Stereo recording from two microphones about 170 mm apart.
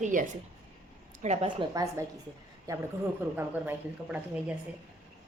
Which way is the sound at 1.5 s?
25° right (ahead or behind).